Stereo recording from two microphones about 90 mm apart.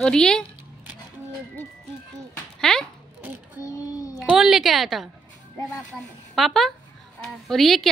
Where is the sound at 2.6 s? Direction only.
5° left (ahead or behind).